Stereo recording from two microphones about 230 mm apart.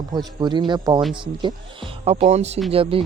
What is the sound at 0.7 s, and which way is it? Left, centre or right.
Speech, centre.